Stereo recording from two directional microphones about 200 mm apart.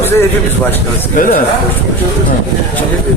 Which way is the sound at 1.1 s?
45° left (ahead or behind).